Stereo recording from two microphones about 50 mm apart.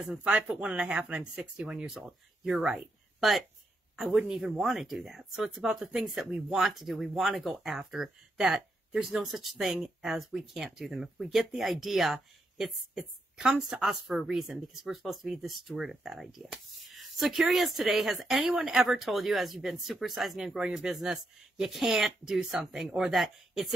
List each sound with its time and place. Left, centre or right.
0.0 s speech: right
1.9 s speech: centre
3.2 s speech: centre
3.9 s a sound: centre
4.3 s speech: centre